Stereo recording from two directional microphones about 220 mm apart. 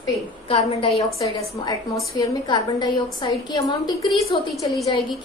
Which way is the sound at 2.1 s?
20° left (ahead or behind).